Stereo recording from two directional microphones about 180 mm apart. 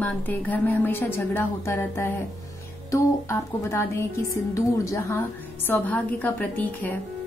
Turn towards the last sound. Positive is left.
turn(degrees=10)  # may be behind; listen again after turning